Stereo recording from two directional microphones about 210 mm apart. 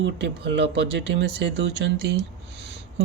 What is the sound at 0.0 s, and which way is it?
Speech, 55° right (ahead or behind).